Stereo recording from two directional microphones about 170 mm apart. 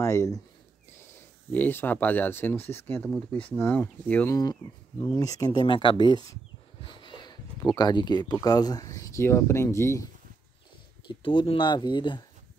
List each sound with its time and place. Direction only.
0.0 s speech: 15° left (ahead or behind)
1.5 s speech: 10° left (ahead or behind)
4.4 s speech: 25° left (ahead or behind)
11.1 s speech: 30° left (ahead or behind)